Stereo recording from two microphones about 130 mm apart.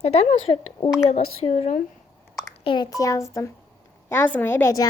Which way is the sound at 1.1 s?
55° left (ahead or behind).